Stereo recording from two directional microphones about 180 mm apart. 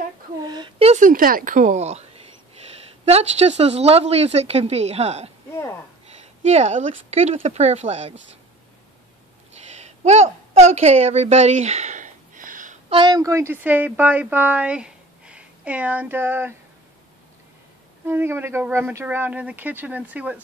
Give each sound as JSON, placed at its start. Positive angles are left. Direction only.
{"t": 0.4, "sound": "a woman's voice", "side_deg": -25}
{"t": 3.1, "sound": "speech", "side_deg": -35}
{"t": 9.8, "sound": "a sound", "side_deg": -40}
{"t": 12.9, "sound": "a woman's voice", "side_deg": -25}
{"t": 18.0, "sound": "speech", "side_deg": -10}